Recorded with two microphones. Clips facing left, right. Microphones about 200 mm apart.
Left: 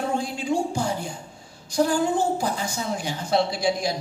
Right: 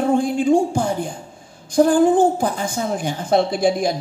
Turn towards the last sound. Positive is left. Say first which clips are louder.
# right 6 dB
turn(degrees=-50)  # may be behind; listen again after turning